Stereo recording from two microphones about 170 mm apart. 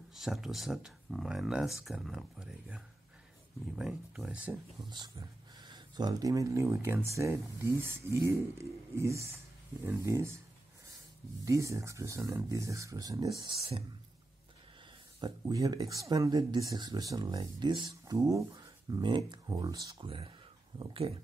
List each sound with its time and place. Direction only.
0.1 s speech: centre (ahead or behind)
4.8 s speech: 25° right (ahead or behind)
11.4 s speech: 20° right (ahead or behind)
15.1 s speech: 25° right (ahead or behind)